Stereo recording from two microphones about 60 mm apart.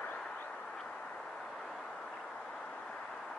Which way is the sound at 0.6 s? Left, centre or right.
Centre.